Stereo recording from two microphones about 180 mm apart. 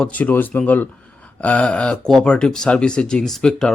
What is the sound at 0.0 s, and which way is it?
Speech, 10° left (ahead or behind).